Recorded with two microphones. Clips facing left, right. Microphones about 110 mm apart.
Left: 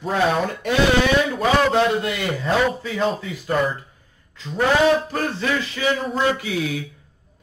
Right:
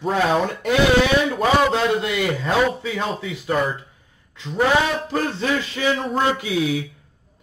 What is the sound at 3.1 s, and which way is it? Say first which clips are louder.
Speech: right 2 dB; 20° right (ahead or behind).